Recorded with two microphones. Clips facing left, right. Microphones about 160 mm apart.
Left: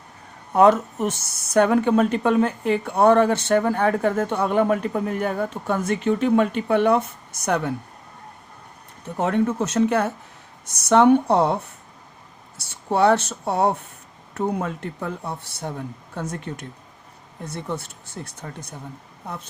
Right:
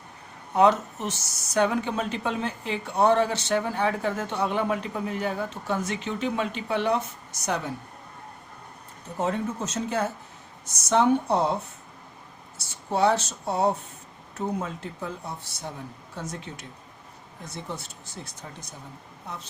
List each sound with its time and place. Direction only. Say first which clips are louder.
0.5 s speech: left 5 dB; 55° left (ahead or behind)
9.1 s speech: left 6 dB; 65° left (ahead or behind)